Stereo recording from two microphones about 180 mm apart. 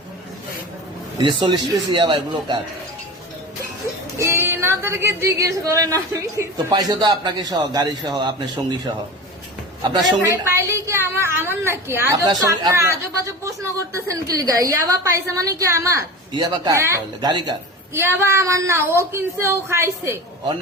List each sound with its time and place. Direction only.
1.2 s a woman's voice: 25° right (ahead or behind)
4.2 s a woman's voice: 15° right (ahead or behind)
10.2 s a woman's voice: 15° right (ahead or behind)